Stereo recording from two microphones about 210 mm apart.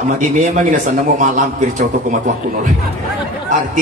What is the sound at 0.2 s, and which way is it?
A man's voice, 35° right (ahead or behind).